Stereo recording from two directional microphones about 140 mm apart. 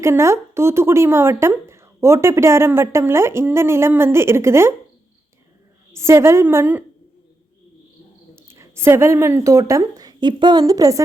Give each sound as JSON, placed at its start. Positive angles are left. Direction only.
{"t": 0.0, "sound": "speech", "side_deg": -20}
{"t": 5.9, "sound": "speech", "side_deg": -20}
{"t": 8.4, "sound": "a woman's voice", "side_deg": -20}